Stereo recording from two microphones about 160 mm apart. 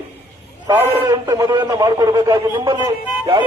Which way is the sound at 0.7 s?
25° right (ahead or behind).